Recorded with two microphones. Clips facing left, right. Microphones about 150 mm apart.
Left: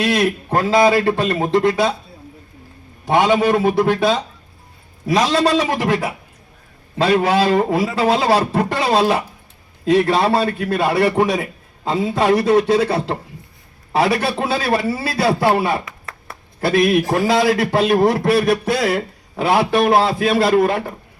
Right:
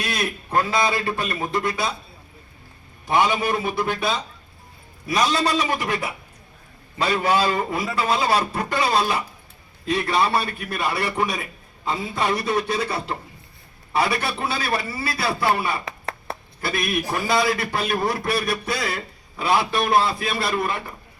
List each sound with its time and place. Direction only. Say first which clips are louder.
0.0 s a man's voice: left 10 dB; 90° left
3.1 s a man's voice: left 6 dB; 90° left
15.9 s a sound: right 5 dB; 25° right (ahead or behind)
16.6 s a man's voice: left 11 dB; 90° left